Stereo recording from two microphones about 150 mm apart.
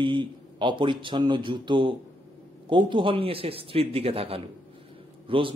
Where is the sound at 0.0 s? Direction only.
35° right (ahead or behind).